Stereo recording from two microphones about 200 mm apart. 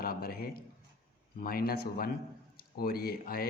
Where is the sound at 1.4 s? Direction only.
50° left (ahead or behind).